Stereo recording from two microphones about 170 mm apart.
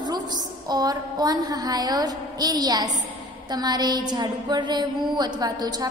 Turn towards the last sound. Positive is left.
turn(degrees=-25)  # may be behind; listen again after turning